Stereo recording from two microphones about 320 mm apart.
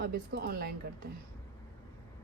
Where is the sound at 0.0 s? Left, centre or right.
Right.